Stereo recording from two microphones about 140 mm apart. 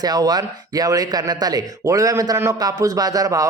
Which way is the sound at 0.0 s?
30° right (ahead or behind).